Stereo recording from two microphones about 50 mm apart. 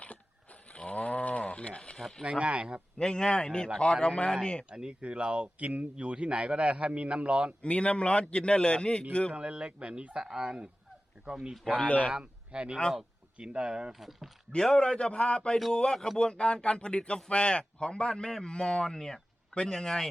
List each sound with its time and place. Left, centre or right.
0.7 s a sound: left
2.0 s speech: centre
2.4 s speech: right
3.0 s a man's voice: centre
4.7 s speech: centre
7.6 s a man's voice: left
9.3 s speech: right
10.2 s speech: centre
11.8 s a man's voice: left
12.1 s speech: right
14.0 s speech: centre
14.6 s a man's voice: centre